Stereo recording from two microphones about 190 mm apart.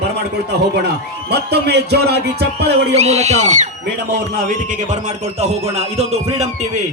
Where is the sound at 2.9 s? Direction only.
35° right (ahead or behind).